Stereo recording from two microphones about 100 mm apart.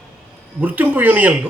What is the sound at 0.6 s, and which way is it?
Speech, 20° right (ahead or behind).